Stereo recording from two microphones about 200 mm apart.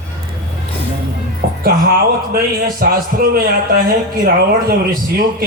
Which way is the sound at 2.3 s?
50° right (ahead or behind).